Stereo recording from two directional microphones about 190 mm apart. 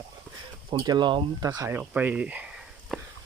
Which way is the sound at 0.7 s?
25° right (ahead or behind).